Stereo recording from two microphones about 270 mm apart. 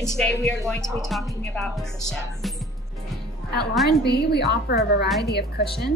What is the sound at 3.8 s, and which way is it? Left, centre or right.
Speech, left.